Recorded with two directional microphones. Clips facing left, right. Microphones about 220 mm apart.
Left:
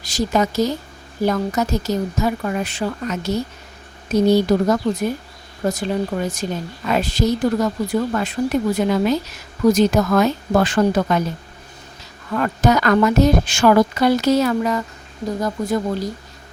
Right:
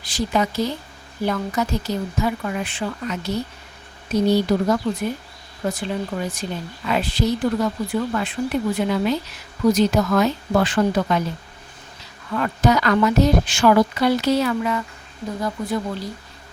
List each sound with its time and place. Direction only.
0.0 s a woman's voice: 45° left (ahead or behind)
12.3 s a woman's voice: 45° left (ahead or behind)